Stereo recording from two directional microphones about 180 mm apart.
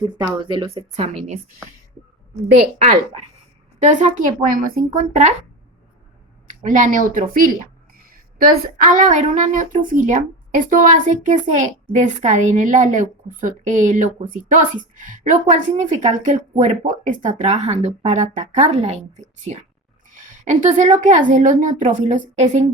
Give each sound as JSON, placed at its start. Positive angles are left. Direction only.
{"t": 0.2, "sound": "speech", "side_deg": -25}
{"t": 3.8, "sound": "a woman's voice", "side_deg": -40}
{"t": 6.6, "sound": "a woman's voice", "side_deg": -45}